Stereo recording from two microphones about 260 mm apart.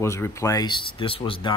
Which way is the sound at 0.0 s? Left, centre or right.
Centre.